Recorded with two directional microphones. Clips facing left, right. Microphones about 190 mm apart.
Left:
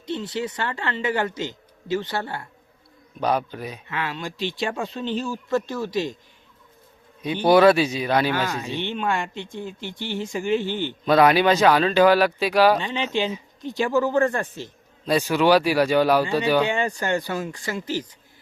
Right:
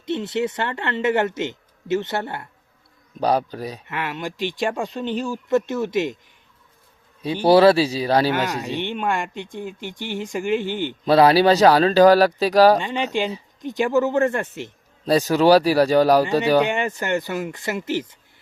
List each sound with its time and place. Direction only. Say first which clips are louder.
0.0 s speech: right 4 dB; 25° right (ahead or behind)
3.2 s speech: right 3 dB; 35° right (ahead or behind)
4.0 s speech: right 2 dB; 20° right (ahead or behind)
7.4 s speech: right 2 dB; 30° right (ahead or behind)
8.7 s speech: right 1 dB; 15° right (ahead or behind)
11.0 s speech: right 3 dB; 30° right (ahead or behind)
13.6 s speech: right 2 dB; 15° right (ahead or behind)
15.0 s speech: right 3 dB; 40° right (ahead or behind)
16.9 s speech: right 1 dB; 20° right (ahead or behind)